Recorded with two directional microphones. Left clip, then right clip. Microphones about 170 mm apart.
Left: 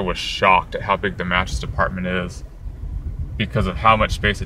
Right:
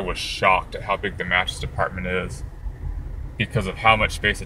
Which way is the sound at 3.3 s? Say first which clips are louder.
Left 2 dB; 25° left (ahead or behind).